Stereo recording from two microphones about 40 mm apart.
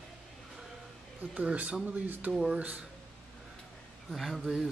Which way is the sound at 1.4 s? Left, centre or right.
Right.